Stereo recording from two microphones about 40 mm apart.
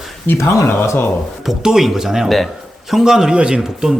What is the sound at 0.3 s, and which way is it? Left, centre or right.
Speech, left.